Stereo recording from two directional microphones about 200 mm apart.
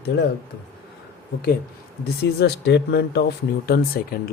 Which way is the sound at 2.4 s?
55° left (ahead or behind).